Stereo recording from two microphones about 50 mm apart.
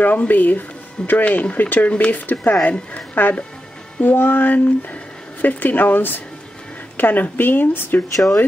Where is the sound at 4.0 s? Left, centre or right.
Left.